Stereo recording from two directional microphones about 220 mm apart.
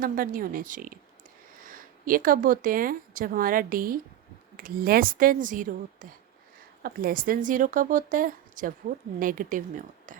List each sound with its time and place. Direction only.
0.0 s a woman's voice: 40° right (ahead or behind)